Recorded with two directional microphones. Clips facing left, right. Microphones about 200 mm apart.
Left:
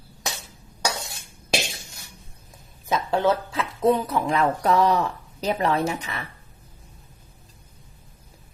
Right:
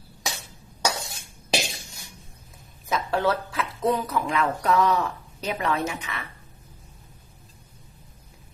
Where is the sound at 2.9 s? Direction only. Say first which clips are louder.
Left 2 dB; 25° left (ahead or behind).